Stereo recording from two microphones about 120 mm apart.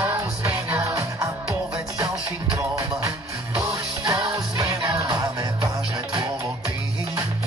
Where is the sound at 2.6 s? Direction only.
25° right (ahead or behind).